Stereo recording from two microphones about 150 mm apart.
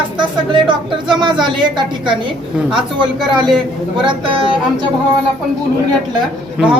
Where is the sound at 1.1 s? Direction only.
30° right (ahead or behind).